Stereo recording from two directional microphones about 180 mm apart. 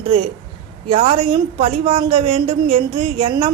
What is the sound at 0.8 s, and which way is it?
A woman's voice, 30° right (ahead or behind).